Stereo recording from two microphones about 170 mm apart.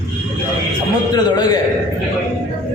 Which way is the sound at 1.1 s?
25° left (ahead or behind).